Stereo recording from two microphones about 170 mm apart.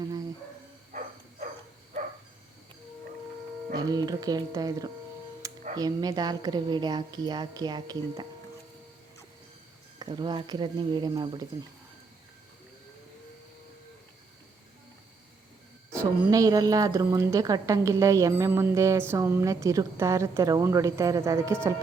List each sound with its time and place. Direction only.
0.9 s a sound: 50° right (ahead or behind)
3.8 s a woman's voice: 20° right (ahead or behind)
10.0 s a woman's voice: 25° right (ahead or behind)
15.9 s a woman's voice: 20° right (ahead or behind)